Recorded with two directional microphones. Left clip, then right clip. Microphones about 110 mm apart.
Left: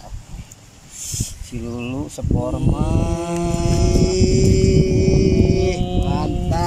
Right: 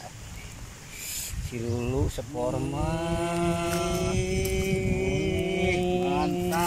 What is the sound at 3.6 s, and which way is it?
Music, 40° left (ahead or behind).